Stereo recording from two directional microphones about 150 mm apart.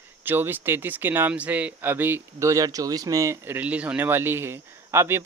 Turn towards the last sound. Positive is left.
turn(degrees=-15)  # may be behind; listen again after turning